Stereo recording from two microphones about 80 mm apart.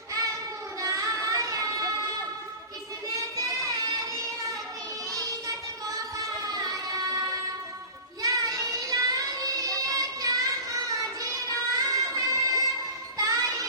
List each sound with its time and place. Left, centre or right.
0.2 s child singing: right
5.1 s child singing: right
13.2 s music: right